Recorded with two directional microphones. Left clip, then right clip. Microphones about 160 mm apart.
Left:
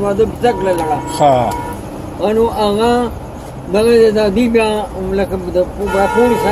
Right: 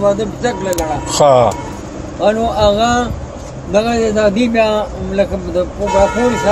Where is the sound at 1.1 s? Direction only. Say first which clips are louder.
Right 3 dB; 65° right (ahead or behind).